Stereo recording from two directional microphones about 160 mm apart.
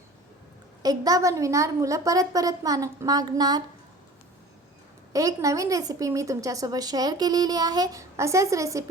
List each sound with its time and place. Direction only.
0.8 s a woman's voice: 20° right (ahead or behind)
5.1 s a woman's voice: 20° right (ahead or behind)